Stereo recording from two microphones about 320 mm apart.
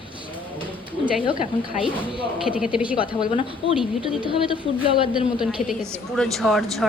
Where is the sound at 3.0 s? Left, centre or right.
Centre.